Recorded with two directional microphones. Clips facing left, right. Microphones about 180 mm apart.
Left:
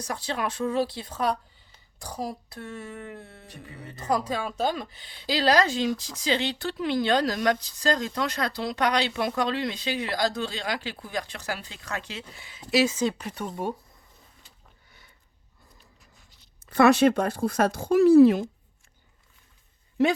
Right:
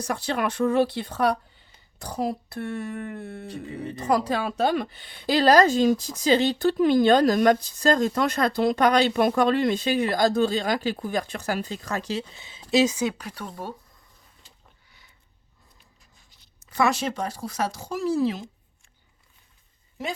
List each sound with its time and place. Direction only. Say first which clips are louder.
0.1 s speech: right 4 dB; 60° right (ahead or behind)
4.1 s speech: right 3 dB; 70° right (ahead or behind); by 12.2 s 40° right (ahead or behind)
12.3 s speech: right 1 dB; 25° right (ahead or behind)
13.1 s speech: left 1 dB; 5° left (ahead or behind)
16.6 s speech: left 6 dB; 60° left (ahead or behind)